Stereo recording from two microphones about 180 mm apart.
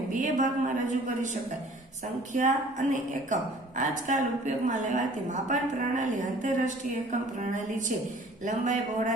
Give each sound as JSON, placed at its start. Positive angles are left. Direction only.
{"t": 0.1, "sound": "a woman's voice", "side_deg": -45}